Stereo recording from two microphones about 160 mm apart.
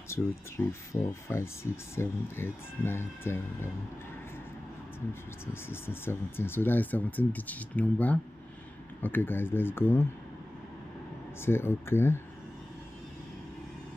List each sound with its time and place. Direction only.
0.2 s speech: 10° left (ahead or behind)
0.9 s speech: 35° left (ahead or behind)
1.3 s speech: 15° left (ahead or behind)
5.5 s speech: 15° left (ahead or behind)
11.4 s speech: 15° left (ahead or behind)